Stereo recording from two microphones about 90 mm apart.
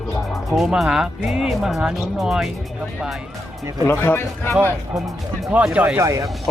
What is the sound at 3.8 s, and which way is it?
Speech, 25° left (ahead or behind).